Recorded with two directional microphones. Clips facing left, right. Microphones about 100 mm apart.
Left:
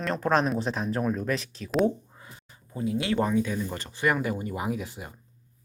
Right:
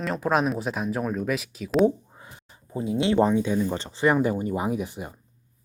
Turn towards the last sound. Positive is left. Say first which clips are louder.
# right 4 dB
turn(degrees=-20)  # may be behind; listen again after turning